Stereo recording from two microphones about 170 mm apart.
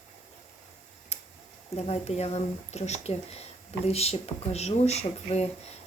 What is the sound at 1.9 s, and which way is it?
Speech, 40° left (ahead or behind).